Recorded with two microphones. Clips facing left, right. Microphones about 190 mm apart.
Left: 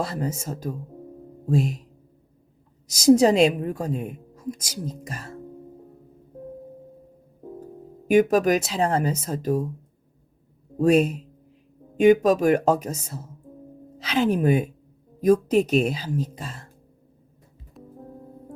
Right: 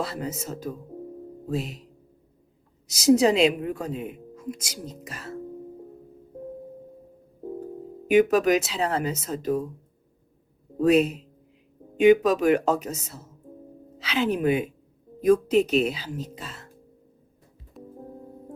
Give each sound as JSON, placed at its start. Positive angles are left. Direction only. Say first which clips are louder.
{"t": 0.0, "sound": "a woman's voice", "louder": "left 2 dB", "side_deg": 45}
{"t": 2.9, "sound": "a woman's voice", "louder": "left 3 dB", "side_deg": 40}
{"t": 8.0, "sound": "a woman's voice", "louder": "left 1 dB", "side_deg": 45}
{"t": 10.8, "sound": "a woman's voice", "louder": "left 1 dB", "side_deg": 45}
{"t": 17.7, "sound": "music", "louder": "right 2 dB", "side_deg": 0}